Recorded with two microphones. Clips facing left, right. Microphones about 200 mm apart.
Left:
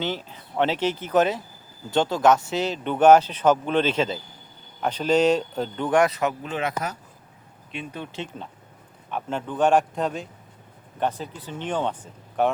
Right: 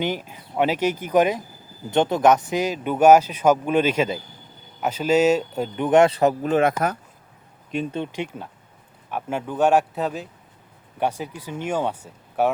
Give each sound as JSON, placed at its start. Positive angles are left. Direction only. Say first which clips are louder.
{"t": 0.0, "sound": "speech", "louder": "right 3 dB", "side_deg": -15}
{"t": 6.4, "sound": "speech", "louder": "right 8 dB", "side_deg": -50}
{"t": 7.9, "sound": "speech", "louder": "right 7 dB", "side_deg": -25}
{"t": 8.1, "sound": "speech", "louder": "right 4 dB", "side_deg": -15}